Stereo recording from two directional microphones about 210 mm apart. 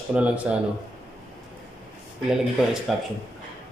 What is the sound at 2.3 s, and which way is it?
Speech, centre (ahead or behind).